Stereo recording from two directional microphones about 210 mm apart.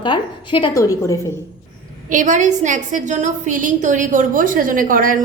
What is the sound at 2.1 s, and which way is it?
A woman's voice, 35° right (ahead or behind).